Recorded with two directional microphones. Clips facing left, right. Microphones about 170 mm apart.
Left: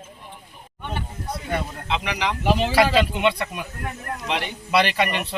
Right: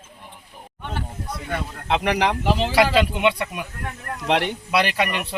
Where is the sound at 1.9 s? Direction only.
55° right (ahead or behind).